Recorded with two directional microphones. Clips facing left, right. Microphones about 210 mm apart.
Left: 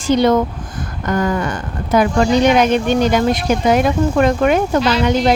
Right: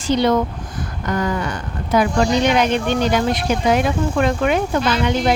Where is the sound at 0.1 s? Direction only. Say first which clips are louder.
Left 3 dB; 50° left (ahead or behind).